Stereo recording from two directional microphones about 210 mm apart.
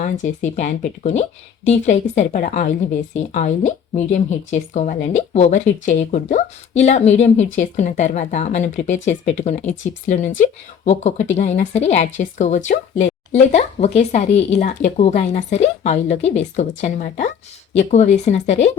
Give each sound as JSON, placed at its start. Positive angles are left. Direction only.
{"t": 0.0, "sound": "speech", "side_deg": 35}